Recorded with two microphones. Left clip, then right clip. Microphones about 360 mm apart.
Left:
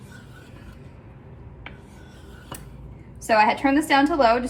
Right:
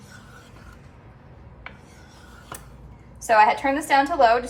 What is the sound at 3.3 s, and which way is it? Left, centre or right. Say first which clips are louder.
A woman's voice: right 1 dB; right.